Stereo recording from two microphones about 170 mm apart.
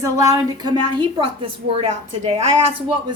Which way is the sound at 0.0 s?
20° right (ahead or behind).